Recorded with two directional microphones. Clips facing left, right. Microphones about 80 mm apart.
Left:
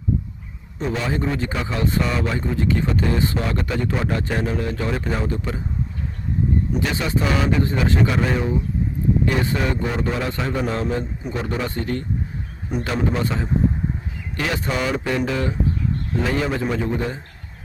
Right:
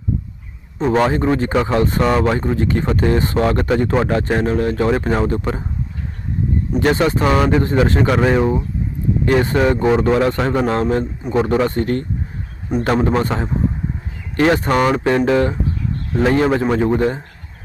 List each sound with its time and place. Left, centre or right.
0.9 s speech: right
1.2 s speech: right
6.7 s speech: right
9.9 s a man's voice: right